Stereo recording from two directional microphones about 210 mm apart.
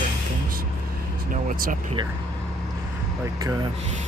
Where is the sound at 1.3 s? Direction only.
40° right (ahead or behind).